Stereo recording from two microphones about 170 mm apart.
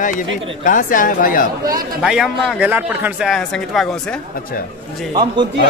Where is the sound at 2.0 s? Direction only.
5° right (ahead or behind).